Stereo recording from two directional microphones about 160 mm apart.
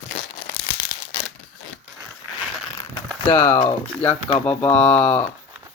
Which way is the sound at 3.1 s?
10° left (ahead or behind).